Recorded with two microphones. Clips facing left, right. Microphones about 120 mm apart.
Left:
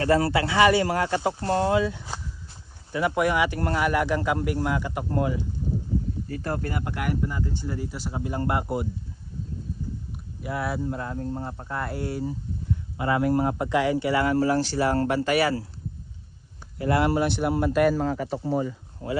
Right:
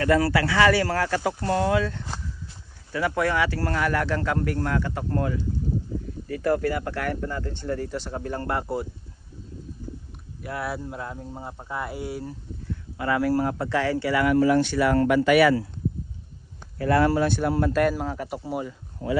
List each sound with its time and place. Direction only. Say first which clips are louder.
0.0 s speech: right 1 dB; 25° left (ahead or behind)
1.8 s speech: left 2 dB; 10° left (ahead or behind)
6.2 s speech: right 6 dB; 30° left (ahead or behind)
10.1 s speech: left 1 dB; centre (ahead or behind)
12.6 s speech: left 1 dB; 25° left (ahead or behind)
16.7 s speech: right 2 dB; 20° left (ahead or behind)
17.9 s speech: left 4 dB; 5° right (ahead or behind)
19.0 s speech: right 3 dB; 30° right (ahead or behind)